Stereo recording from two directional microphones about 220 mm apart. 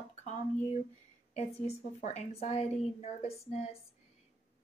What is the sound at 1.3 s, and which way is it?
Speech, 30° left (ahead or behind).